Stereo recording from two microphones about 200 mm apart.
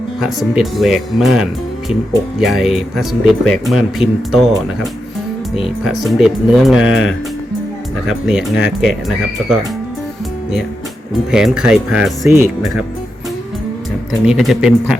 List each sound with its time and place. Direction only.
0.2 s speech: centre (ahead or behind)
6.1 s speech: centre (ahead or behind)
8.0 s speech: 5° right (ahead or behind)
11.3 s speech: 5° right (ahead or behind)
14.1 s speech: centre (ahead or behind)